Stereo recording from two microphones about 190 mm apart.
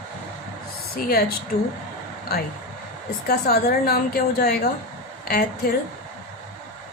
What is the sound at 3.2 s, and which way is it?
A woman's voice, 55° left (ahead or behind).